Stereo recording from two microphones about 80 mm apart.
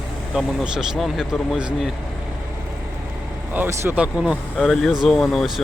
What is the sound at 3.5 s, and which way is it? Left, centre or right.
Speech, right.